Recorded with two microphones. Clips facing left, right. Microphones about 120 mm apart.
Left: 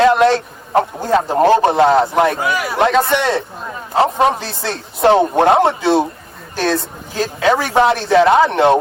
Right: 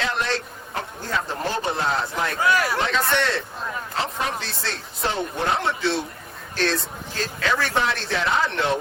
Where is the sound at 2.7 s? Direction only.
60° left (ahead or behind).